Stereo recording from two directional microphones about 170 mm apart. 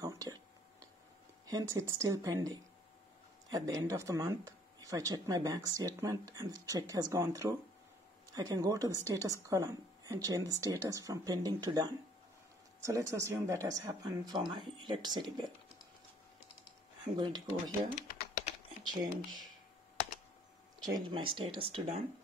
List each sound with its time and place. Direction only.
0.0 s a sound: 20° right (ahead or behind)
1.4 s speech: 20° right (ahead or behind)
17.0 s speech: 25° right (ahead or behind)
17.6 s speech: 55° left (ahead or behind)
20.8 s speech: 25° right (ahead or behind)